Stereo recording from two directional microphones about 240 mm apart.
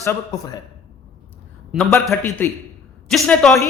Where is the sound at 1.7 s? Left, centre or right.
Centre.